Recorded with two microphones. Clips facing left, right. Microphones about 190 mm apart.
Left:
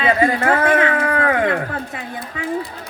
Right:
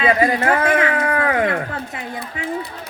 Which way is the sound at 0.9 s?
20° right (ahead or behind).